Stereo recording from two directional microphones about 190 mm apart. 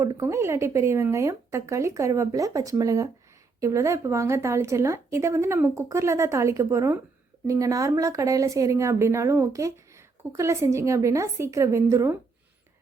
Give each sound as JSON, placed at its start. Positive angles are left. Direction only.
{"t": 0.0, "sound": "a woman's voice", "side_deg": -15}